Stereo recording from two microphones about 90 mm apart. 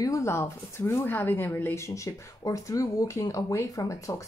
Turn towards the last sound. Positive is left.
turn(degrees=35)  # may be behind; listen again after turning